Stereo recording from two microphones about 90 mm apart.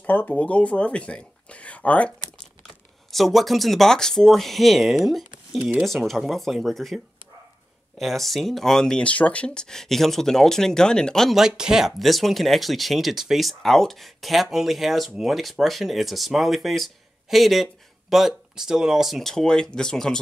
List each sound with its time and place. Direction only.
0.0 s speech: 20° left (ahead or behind)
3.1 s speech: centre (ahead or behind)
8.0 s speech: centre (ahead or behind)